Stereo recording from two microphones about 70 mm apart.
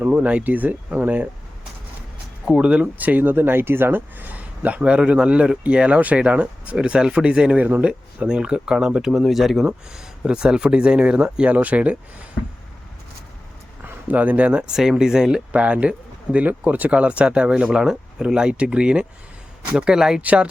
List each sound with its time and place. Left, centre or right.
0.0 s speech: centre
2.5 s speech: centre
13.8 s speech: right
15.5 s speech: centre